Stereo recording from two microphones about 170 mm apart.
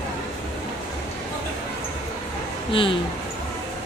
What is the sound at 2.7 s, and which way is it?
Speech, 30° left (ahead or behind).